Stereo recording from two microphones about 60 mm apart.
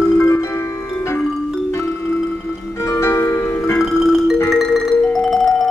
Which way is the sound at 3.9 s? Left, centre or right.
Centre.